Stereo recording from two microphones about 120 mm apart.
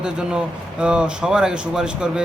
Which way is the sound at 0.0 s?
5° right (ahead or behind).